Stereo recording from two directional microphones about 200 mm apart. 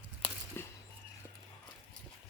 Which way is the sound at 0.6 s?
10° left (ahead or behind).